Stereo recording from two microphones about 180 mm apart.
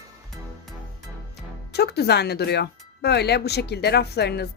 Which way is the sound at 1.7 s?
65° left (ahead or behind).